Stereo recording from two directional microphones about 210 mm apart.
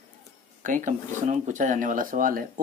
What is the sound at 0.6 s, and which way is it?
Speech, 35° right (ahead or behind).